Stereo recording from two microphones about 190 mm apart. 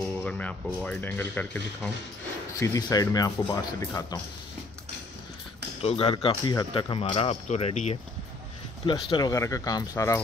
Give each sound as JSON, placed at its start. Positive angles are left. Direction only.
{"t": 0.2, "sound": "a sound", "side_deg": 5}
{"t": 0.7, "sound": "speech", "side_deg": 5}
{"t": 5.8, "sound": "speech", "side_deg": 30}
{"t": 8.8, "sound": "speech", "side_deg": 20}